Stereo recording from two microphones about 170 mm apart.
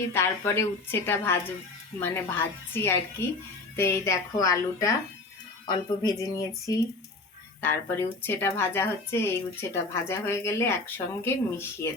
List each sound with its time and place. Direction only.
0.1 s a woman's voice: 15° left (ahead or behind)